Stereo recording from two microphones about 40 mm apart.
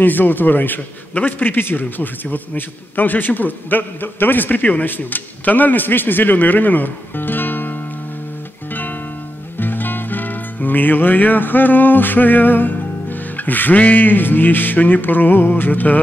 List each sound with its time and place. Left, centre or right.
0.0 s a man's voice: left
9.6 s music: left